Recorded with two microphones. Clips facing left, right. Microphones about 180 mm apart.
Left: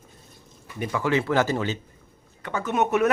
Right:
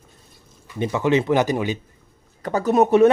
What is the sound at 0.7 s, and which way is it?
Speech, 20° right (ahead or behind).